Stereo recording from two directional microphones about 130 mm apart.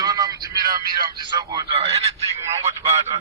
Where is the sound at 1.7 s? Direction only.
50° right (ahead or behind).